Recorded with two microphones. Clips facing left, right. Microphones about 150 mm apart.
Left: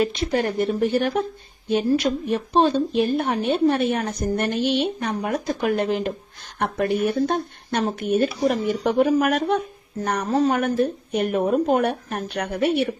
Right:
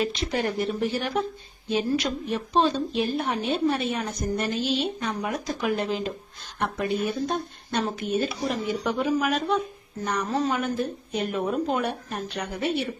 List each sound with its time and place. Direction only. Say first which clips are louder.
0.0 s speech: left 5 dB; 50° left (ahead or behind)